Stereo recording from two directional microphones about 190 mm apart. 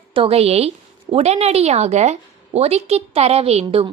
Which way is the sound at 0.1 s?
30° right (ahead or behind).